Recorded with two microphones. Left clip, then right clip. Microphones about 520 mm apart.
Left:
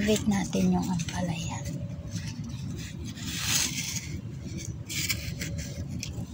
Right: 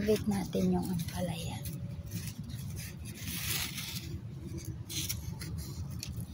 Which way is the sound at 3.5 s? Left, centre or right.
Right.